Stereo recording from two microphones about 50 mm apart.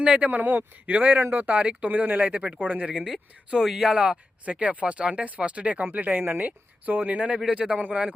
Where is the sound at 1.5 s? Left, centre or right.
Right.